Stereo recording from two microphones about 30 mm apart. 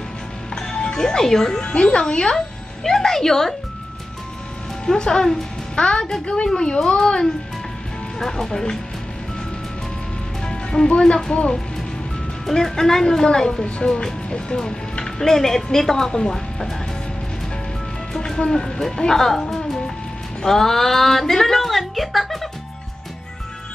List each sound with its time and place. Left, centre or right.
0.9 s speech: centre
1.6 s speech: left
2.3 s speech: centre
4.8 s speech: left
8.2 s speech: centre
8.5 s speech: left
10.4 s music: left
11.0 s speech: left
12.5 s speech: centre
14.3 s music: left
15.1 s speech: centre
18.1 s music: centre
18.4 s speech: left; by 22.5 s centre